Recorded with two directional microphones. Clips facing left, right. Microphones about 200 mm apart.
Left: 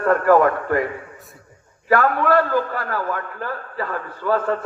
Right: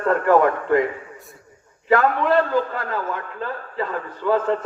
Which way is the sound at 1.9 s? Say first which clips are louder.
Even; 20° right (ahead or behind).